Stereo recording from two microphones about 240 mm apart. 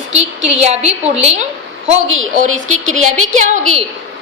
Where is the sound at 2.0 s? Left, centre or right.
Right.